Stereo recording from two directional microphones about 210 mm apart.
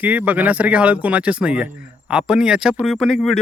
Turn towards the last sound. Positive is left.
turn(degrees=0)  # may be behind; listen again after turning